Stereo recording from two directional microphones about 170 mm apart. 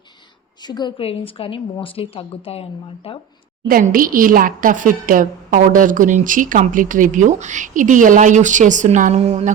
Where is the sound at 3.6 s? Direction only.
55° right (ahead or behind).